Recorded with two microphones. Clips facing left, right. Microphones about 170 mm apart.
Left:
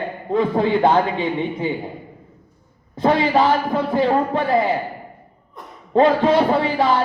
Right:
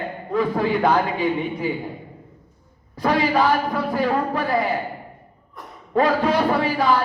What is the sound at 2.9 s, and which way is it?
A man's voice, 25° left (ahead or behind).